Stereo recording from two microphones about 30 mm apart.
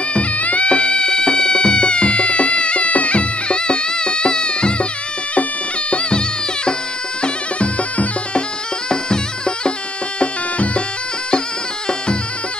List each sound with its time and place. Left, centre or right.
0.1 s music: left
0.7 s music: left
5.9 s music: left
8.8 s music: left
10.1 s music: left